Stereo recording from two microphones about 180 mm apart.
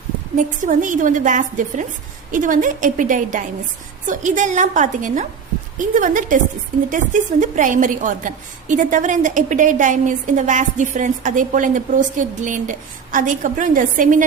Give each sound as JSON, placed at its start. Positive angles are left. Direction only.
{"t": 0.3, "sound": "a woman's voice", "side_deg": -45}